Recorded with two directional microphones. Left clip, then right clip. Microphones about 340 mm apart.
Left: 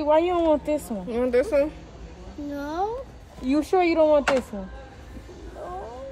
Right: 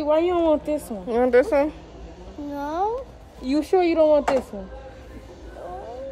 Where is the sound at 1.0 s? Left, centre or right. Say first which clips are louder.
Right 6 dB; centre.